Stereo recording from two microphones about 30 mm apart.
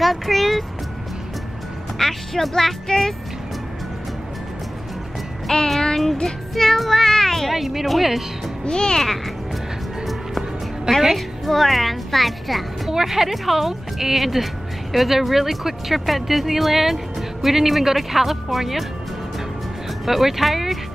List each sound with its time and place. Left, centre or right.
0.0 s speech: centre
2.0 s speech: centre
5.5 s a child's voice: centre
6.5 s child singing: centre
7.5 s speech: centre
8.6 s a child's voice: left
11.0 s a woman's voice: centre
11.4 s speech: centre
13.0 s speech: centre
20.1 s speech: centre